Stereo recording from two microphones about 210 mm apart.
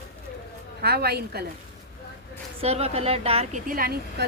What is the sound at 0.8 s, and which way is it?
Speech, 50° right (ahead or behind).